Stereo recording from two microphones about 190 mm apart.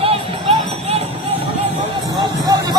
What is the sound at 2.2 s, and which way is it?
Music, 20° right (ahead or behind).